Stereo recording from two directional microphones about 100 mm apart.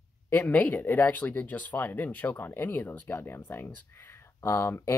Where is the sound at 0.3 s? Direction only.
15° left (ahead or behind).